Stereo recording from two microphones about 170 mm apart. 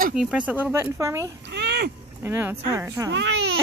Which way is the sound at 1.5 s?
75° right (ahead or behind).